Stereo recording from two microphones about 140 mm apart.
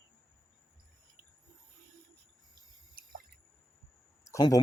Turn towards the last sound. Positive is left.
turn(degrees=25)  # may be behind; listen again after turning